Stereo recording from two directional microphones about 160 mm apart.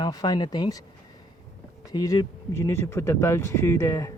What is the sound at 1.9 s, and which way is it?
Speech, 25° left (ahead or behind).